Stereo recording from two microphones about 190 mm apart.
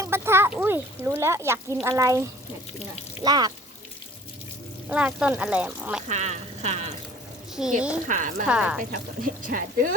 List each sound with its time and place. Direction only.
0.0 s speech: 15° right (ahead or behind)
3.2 s speech: 20° right (ahead or behind)
4.9 s speech: 5° right (ahead or behind)
6.1 s speech: 35° right (ahead or behind)
8.0 s speech: 40° right (ahead or behind)
8.4 s speech: 5° right (ahead or behind)
8.8 s speech: 45° right (ahead or behind)